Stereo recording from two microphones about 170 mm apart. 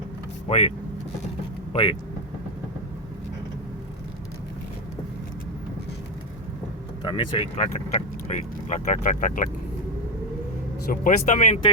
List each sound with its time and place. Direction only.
0.4 s speech: 40° left (ahead or behind)
1.7 s speech: 30° left (ahead or behind)
7.0 s speech: 25° left (ahead or behind)
7.6 s speech: 45° left (ahead or behind)
10.8 s speech: 50° left (ahead or behind)